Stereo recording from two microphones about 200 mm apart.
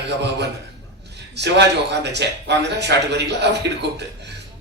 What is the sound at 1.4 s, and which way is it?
A man's voice, 60° right (ahead or behind).